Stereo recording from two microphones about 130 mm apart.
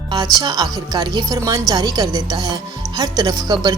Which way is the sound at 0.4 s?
30° right (ahead or behind).